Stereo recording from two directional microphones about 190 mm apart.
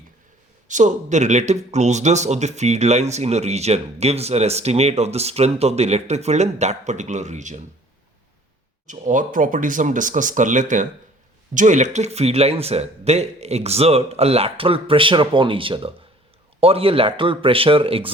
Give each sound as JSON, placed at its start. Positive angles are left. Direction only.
{"t": 0.7, "sound": "speech", "side_deg": -40}
{"t": 8.9, "sound": "speech", "side_deg": -45}